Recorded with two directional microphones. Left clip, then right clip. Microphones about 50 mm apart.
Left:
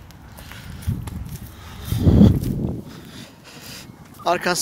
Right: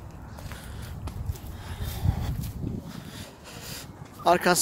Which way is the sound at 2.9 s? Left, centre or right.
Right.